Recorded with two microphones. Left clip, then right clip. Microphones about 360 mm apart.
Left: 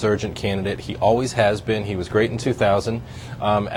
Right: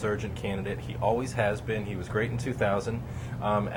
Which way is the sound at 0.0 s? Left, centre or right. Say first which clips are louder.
Left 10 dB; left.